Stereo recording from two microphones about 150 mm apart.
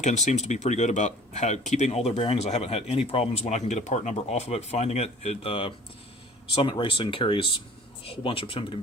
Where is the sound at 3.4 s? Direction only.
50° left (ahead or behind).